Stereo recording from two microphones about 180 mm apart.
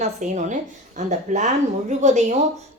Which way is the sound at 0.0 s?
45° right (ahead or behind).